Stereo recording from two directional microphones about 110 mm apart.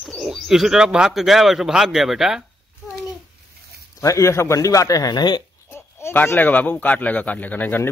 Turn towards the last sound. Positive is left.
turn(degrees=15)  # may be behind; listen again after turning